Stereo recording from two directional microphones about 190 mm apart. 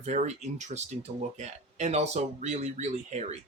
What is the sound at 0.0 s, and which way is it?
A man's voice, 35° right (ahead or behind).